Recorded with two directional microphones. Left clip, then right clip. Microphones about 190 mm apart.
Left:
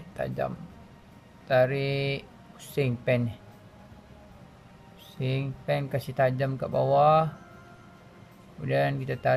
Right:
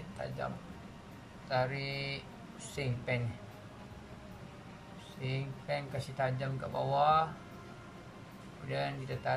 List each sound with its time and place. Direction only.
0.2 s speech: 45° left (ahead or behind)
1.5 s speech: 45° left (ahead or behind)
5.2 s speech: 45° left (ahead or behind)
8.6 s speech: 45° left (ahead or behind)